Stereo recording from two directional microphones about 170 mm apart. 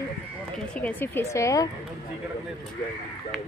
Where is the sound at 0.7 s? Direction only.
10° left (ahead or behind).